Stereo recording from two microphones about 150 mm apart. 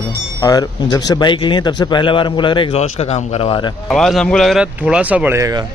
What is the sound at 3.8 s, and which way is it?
Speech, centre (ahead or behind).